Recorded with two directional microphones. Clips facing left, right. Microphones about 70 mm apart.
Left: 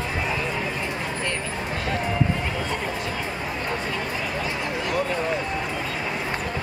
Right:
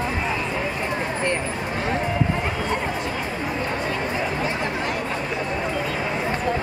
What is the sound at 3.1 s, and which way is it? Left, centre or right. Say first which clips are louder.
Chatter: right 3 dB; centre.